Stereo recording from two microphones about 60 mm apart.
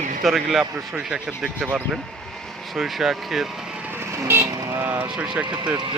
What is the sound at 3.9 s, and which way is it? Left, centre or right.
Vehicle, right.